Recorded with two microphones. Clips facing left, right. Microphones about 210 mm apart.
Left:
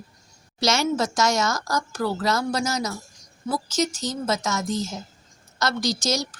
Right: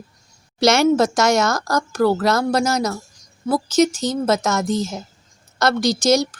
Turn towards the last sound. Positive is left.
turn(degrees=-60)  # may be behind; listen again after turning